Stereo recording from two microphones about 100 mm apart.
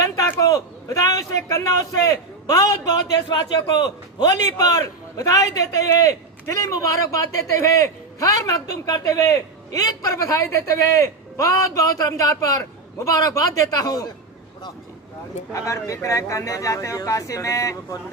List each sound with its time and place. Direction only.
0.3 s a man's voice: 35° left (ahead or behind)
15.5 s a man's voice: 30° left (ahead or behind)